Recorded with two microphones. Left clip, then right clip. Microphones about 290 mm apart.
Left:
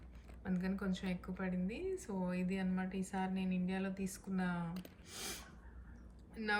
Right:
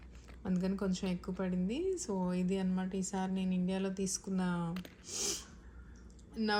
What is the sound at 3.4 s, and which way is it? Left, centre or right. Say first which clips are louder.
Speech: right 4 dB; right.